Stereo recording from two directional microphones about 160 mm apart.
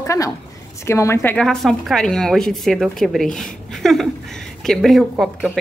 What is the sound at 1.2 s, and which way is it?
A woman's voice, 5° left (ahead or behind).